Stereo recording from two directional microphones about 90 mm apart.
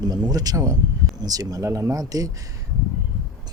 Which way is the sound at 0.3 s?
45° right (ahead or behind).